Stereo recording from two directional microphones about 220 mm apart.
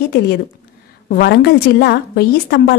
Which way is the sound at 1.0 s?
45° left (ahead or behind).